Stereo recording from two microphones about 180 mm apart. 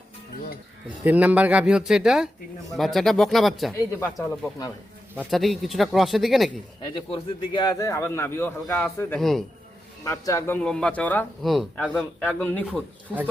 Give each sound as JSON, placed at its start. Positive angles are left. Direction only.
{"t": 1.0, "sound": "speech", "side_deg": -10}
{"t": 4.0, "sound": "speech", "side_deg": 15}
{"t": 5.2, "sound": "speech", "side_deg": 0}
{"t": 6.8, "sound": "speech", "side_deg": 25}
{"t": 12.2, "sound": "speech", "side_deg": 10}